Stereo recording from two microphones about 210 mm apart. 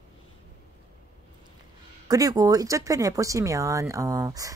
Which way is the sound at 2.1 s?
15° right (ahead or behind).